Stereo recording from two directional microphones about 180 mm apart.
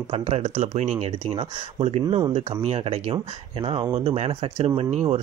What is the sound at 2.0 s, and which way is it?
Speech, 25° right (ahead or behind).